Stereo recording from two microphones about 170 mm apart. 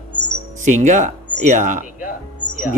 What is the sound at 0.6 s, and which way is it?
Speech, 45° right (ahead or behind).